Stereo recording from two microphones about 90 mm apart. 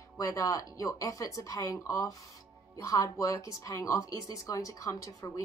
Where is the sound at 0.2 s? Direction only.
40° left (ahead or behind).